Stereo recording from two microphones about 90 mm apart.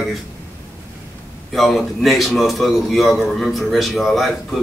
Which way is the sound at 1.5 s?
Centre (ahead or behind).